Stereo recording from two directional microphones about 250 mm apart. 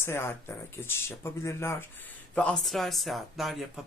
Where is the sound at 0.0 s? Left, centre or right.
Centre.